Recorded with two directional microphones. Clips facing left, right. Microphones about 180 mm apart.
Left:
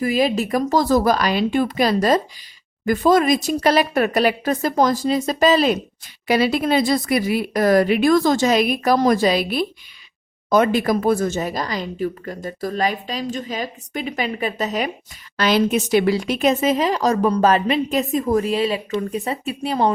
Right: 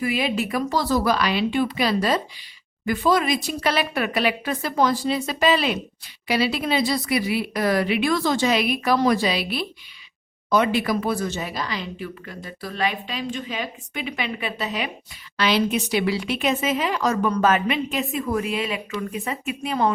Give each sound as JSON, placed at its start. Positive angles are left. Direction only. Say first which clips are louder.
{"t": 0.0, "sound": "speech", "louder": "left 5 dB", "side_deg": 40}